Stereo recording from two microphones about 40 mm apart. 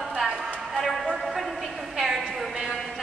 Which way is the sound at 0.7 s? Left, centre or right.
Centre.